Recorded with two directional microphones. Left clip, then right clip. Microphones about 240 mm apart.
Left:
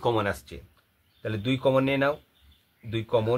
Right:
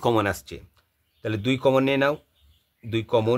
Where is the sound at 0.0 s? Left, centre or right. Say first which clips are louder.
Right 3 dB; right.